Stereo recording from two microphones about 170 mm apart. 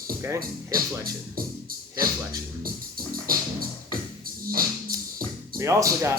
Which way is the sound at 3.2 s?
60° right (ahead or behind).